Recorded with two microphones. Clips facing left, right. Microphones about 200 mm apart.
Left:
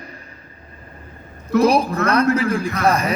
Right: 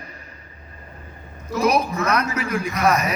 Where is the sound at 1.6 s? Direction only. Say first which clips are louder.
Left 2 dB; 30° left (ahead or behind).